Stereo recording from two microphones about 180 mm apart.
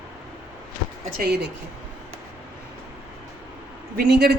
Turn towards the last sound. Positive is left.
turn(degrees=-65)  # may be behind; listen again after turning